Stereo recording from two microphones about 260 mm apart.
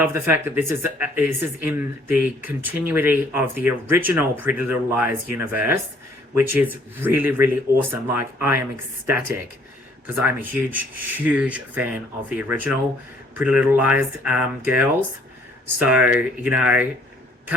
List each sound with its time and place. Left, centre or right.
0.0 s speech: centre
10.7 s speech: centre